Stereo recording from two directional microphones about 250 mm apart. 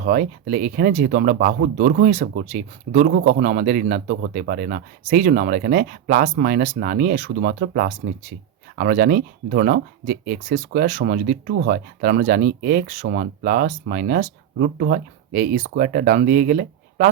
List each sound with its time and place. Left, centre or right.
0.0 s speech: right